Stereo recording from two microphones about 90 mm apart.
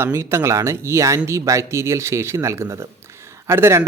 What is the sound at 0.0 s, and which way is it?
Speech, 30° right (ahead or behind).